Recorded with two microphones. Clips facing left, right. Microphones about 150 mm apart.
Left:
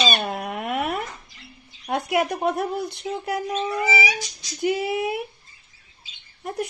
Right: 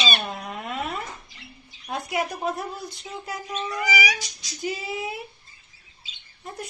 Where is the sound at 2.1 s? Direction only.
65° left (ahead or behind).